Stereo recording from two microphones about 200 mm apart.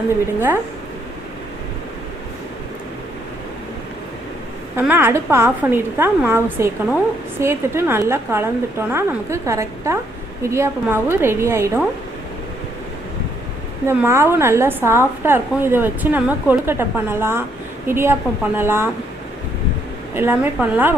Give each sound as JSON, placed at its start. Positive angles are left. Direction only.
{"t": 0.3, "sound": "a woman's voice", "side_deg": -10}
{"t": 4.8, "sound": "a woman's voice", "side_deg": -10}
{"t": 13.8, "sound": "a woman's voice", "side_deg": -15}
{"t": 20.1, "sound": "a woman's voice", "side_deg": -10}